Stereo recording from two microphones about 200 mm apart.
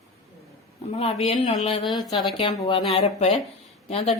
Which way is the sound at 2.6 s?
30° left (ahead or behind).